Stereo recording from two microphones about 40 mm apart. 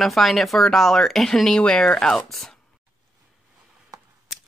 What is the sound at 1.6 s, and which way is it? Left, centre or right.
Speech, left.